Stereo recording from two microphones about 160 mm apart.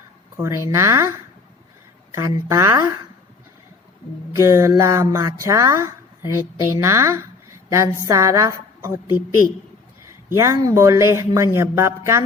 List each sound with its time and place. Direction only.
0.3 s speech: 15° right (ahead or behind)
2.1 s speech: 20° right (ahead or behind)
4.4 s speech: 15° right (ahead or behind)
10.3 s speech: 20° right (ahead or behind)